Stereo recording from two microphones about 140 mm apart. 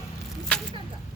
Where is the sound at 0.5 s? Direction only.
10° left (ahead or behind).